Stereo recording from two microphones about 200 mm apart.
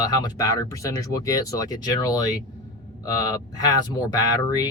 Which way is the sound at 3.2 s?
20° left (ahead or behind).